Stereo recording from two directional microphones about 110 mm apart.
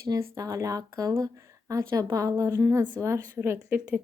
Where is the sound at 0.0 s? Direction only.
30° right (ahead or behind).